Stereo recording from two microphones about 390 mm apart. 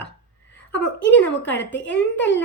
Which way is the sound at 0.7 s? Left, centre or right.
Left.